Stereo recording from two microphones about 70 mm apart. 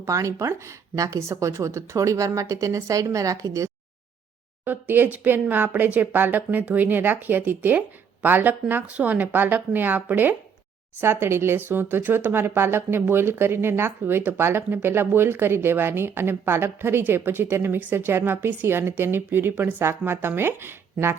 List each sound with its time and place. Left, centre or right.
0.0 s a woman's voice: right
4.6 s speech: right
11.0 s speech: right